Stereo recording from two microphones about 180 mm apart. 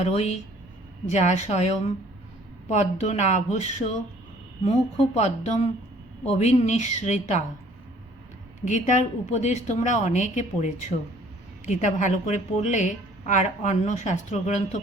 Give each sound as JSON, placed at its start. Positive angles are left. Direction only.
{"t": 0.0, "sound": "a woman's voice", "side_deg": 35}
{"t": 8.6, "sound": "a woman's voice", "side_deg": 40}